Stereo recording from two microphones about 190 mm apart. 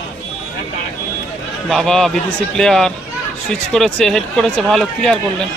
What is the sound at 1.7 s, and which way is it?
A man's voice, centre (ahead or behind).